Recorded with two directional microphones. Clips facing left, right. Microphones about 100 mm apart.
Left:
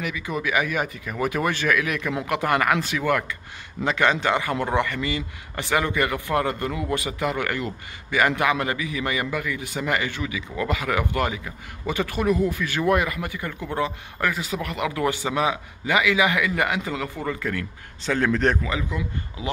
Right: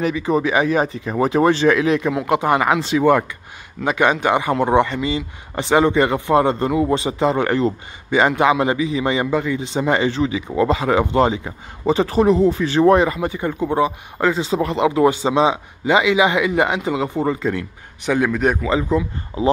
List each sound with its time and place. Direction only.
0.0 s a man's voice: 35° right (ahead or behind); by 18.7 s 10° right (ahead or behind)
18.7 s speech: 30° right (ahead or behind)